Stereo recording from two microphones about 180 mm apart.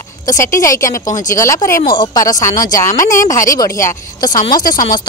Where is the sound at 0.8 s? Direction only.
45° left (ahead or behind).